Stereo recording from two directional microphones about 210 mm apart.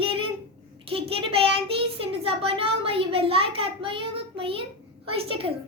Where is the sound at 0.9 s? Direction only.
25° right (ahead or behind).